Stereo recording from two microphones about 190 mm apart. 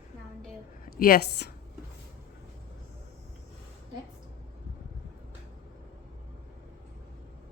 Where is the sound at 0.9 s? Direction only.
50° left (ahead or behind).